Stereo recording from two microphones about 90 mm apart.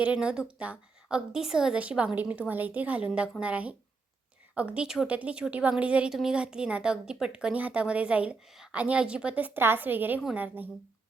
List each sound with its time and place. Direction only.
0.0 s a woman's voice: 15° right (ahead or behind)